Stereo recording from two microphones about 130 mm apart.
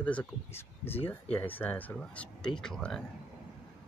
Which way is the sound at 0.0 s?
10° left (ahead or behind).